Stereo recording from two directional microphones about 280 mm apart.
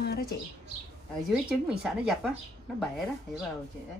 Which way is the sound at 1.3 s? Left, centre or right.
Centre.